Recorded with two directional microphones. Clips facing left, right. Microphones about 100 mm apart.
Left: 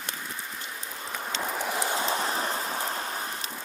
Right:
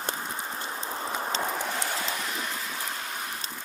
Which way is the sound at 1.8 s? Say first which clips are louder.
Left 4 dB; 30° left (ahead or behind).